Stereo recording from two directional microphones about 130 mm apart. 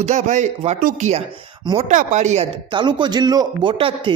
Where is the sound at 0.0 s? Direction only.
65° right (ahead or behind).